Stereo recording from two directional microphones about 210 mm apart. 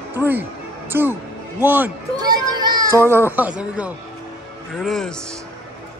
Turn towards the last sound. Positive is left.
turn(degrees=0)  # may be behind; listen again after turning